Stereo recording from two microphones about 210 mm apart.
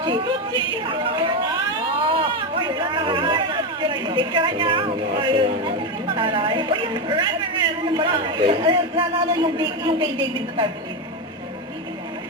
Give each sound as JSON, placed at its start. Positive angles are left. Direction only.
{"t": 0.7, "sound": "a man's voice", "side_deg": -25}
{"t": 2.0, "sound": "a sound", "side_deg": -25}
{"t": 6.1, "sound": "a man's voice", "side_deg": -25}